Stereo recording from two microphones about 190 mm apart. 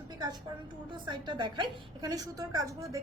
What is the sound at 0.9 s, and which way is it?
A woman's voice, 25° right (ahead or behind).